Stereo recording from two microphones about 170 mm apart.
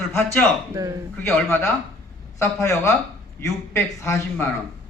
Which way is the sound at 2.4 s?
15° left (ahead or behind).